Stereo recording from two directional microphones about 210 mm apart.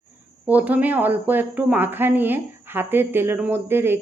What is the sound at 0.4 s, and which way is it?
A woman's voice, 5° right (ahead or behind).